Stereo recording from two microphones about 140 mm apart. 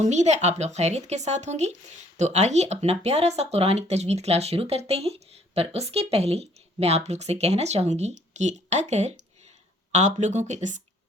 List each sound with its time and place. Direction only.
0.0 s speech: 55° right (ahead or behind)